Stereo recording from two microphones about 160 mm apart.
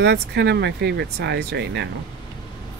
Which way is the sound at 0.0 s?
90° right.